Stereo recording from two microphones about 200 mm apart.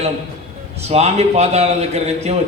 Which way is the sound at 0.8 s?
30° right (ahead or behind).